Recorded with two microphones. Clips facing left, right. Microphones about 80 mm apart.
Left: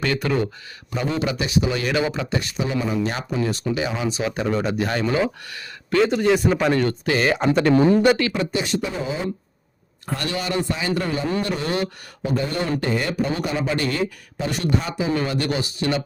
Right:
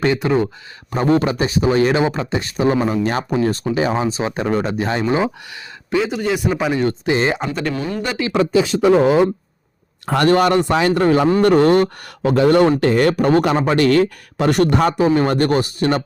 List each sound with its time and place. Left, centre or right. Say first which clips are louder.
0.0 s speech: right 5 dB; right
0.9 s speech: right 8 dB; right; by 6.0 s centre
6.0 s speech: left 2 dB; centre
6.8 s speech: right 3 dB; right
7.4 s speech: left 4 dB; centre
7.7 s speech: left 8 dB; left
8.3 s speech: right 8 dB; right
10.2 s a man's voice: right 11 dB; right
12.2 s a man's voice: right 11 dB; right